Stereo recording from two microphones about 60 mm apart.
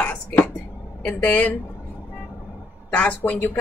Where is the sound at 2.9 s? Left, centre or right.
Left.